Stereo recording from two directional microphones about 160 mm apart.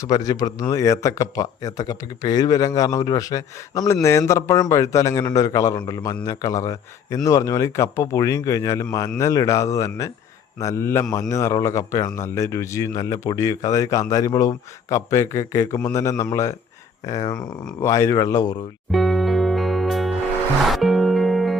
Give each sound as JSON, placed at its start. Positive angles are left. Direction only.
{"t": 0.0, "sound": "a man's voice", "side_deg": 20}
{"t": 18.9, "sound": "music", "side_deg": 0}